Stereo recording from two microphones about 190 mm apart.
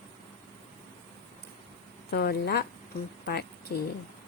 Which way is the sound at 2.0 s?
55° left (ahead or behind).